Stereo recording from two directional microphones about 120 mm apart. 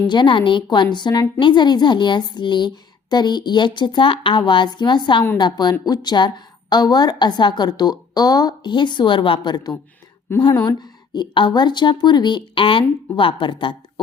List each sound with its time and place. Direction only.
0.1 s a woman's voice: 40° left (ahead or behind)